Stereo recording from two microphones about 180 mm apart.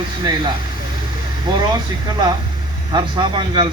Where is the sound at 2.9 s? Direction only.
25° right (ahead or behind).